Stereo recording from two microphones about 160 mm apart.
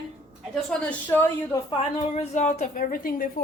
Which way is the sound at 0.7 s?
10° left (ahead or behind).